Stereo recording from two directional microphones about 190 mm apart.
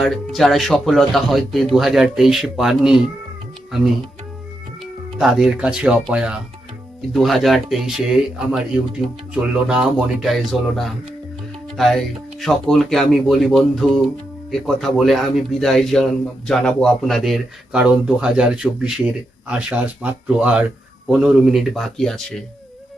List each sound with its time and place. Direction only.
0.0 s speech: centre (ahead or behind)
5.1 s speech: centre (ahead or behind)